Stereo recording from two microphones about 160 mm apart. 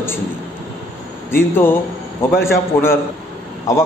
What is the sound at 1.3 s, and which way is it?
A man's voice, 15° left (ahead or behind).